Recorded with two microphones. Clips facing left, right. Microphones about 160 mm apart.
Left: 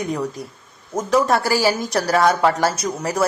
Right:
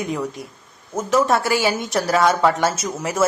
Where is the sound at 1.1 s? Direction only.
Centre (ahead or behind).